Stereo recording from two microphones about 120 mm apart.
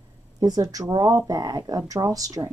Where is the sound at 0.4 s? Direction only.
30° right (ahead or behind).